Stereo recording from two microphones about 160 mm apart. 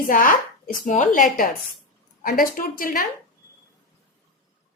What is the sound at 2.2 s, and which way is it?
Speech, 65° left (ahead or behind).